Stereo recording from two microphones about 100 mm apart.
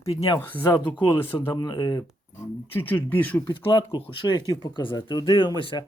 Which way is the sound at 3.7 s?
50° left (ahead or behind).